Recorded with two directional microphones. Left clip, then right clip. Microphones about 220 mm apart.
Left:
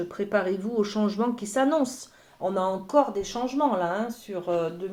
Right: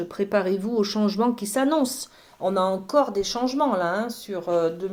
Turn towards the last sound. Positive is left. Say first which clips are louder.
# right 4 dB
turn(degrees=-35)  # may be behind; listen again after turning